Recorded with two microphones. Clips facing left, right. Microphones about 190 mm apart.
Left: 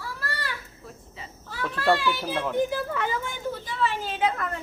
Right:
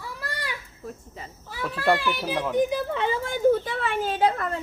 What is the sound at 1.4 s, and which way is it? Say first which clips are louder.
A child's voice: even; 10° right (ahead or behind).